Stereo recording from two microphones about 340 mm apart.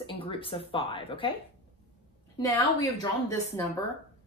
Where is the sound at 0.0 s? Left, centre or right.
Centre.